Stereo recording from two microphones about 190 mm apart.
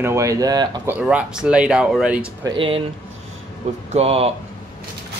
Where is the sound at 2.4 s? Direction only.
25° right (ahead or behind).